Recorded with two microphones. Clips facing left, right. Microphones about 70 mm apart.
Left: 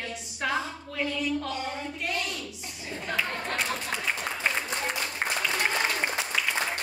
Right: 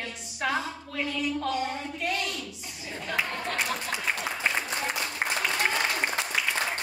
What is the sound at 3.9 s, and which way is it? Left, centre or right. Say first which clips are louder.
Applause: even; centre.